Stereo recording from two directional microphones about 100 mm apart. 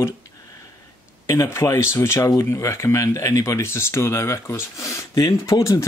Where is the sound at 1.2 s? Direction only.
30° left (ahead or behind).